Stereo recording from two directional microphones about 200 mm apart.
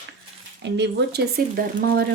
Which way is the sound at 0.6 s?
60° right (ahead or behind).